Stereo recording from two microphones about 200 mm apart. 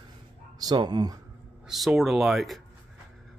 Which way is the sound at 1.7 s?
Centre (ahead or behind).